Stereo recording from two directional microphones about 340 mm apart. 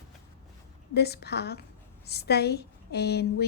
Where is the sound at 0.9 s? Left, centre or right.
Left.